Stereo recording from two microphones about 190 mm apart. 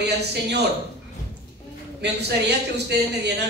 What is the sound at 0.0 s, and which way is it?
Speech, 60° right (ahead or behind).